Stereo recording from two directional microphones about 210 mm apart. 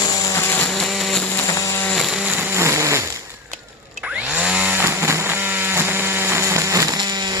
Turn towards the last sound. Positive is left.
turn(degrees=-20)  # may be behind; listen again after turning